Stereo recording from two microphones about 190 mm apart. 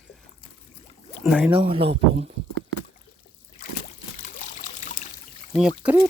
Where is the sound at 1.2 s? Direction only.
5° right (ahead or behind).